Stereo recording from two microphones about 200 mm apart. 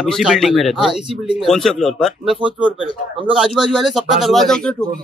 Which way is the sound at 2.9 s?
25° right (ahead or behind).